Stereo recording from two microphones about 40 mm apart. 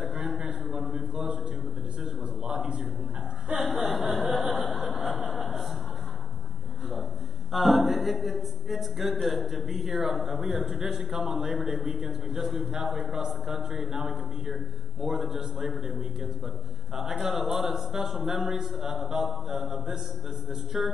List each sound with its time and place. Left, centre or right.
2.4 s a sound: centre
3.4 s speech: centre
3.9 s chuckle: centre
7.5 s speech: centre